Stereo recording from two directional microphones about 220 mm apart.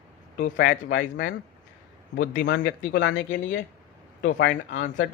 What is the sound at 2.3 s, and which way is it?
Speech, 45° left (ahead or behind).